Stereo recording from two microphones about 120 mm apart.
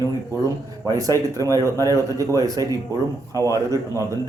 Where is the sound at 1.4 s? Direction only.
25° right (ahead or behind).